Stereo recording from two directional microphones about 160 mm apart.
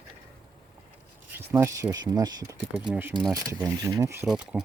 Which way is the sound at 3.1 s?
25° right (ahead or behind).